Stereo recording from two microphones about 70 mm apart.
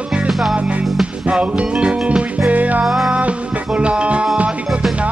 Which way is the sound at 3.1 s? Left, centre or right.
Centre.